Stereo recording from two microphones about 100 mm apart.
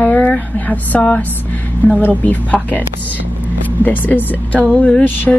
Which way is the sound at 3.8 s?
20° left (ahead or behind).